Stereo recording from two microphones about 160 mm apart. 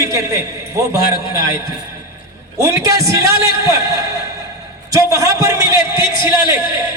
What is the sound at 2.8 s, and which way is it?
Speech, 20° right (ahead or behind).